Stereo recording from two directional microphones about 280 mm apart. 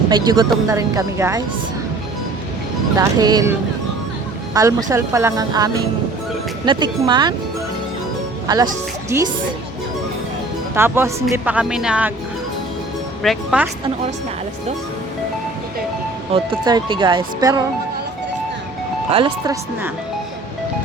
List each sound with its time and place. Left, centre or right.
0.1 s speech: centre
2.9 s speech: centre
4.5 s speech: centre
8.4 s a woman's voice: centre
10.8 s speech: centre
13.2 s speech: centre
16.3 s speech: centre
19.1 s speech: centre